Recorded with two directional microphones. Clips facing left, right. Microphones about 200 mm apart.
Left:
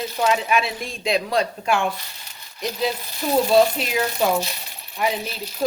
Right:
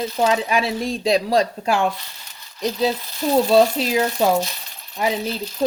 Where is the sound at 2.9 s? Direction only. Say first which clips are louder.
Left 1 dB; 15° left (ahead or behind).